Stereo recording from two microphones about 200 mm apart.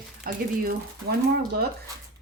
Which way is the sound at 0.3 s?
50° right (ahead or behind).